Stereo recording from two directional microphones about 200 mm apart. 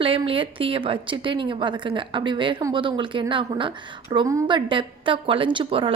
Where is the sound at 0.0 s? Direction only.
25° right (ahead or behind).